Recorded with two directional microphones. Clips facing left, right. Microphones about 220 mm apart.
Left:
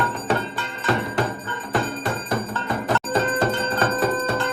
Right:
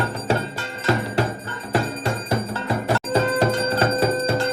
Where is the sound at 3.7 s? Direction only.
30° right (ahead or behind).